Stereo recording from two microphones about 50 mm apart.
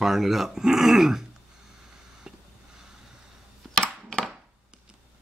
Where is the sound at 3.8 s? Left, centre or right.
Centre.